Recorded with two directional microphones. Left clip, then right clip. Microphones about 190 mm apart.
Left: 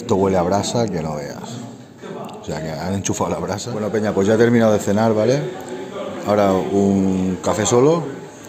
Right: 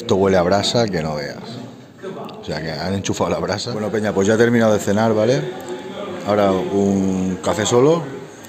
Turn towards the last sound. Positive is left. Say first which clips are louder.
# even
turn(degrees=5)  # may be behind; listen again after turning